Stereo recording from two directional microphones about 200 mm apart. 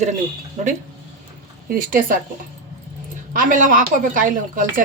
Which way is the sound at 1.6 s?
45° right (ahead or behind).